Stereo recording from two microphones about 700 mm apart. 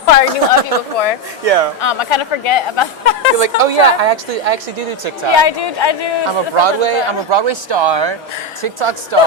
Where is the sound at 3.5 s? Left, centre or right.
Right.